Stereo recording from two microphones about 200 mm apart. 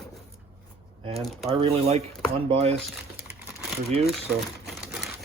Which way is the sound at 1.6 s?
30° right (ahead or behind).